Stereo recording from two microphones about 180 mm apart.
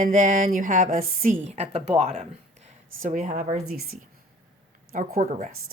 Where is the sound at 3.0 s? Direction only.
45° right (ahead or behind).